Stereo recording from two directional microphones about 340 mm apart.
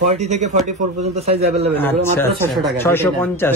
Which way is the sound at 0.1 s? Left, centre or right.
Centre.